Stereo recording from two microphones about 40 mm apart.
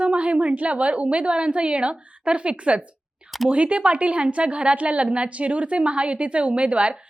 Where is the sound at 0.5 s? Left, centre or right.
Right.